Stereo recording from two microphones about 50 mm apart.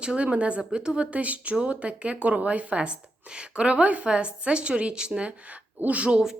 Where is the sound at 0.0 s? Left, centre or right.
Right.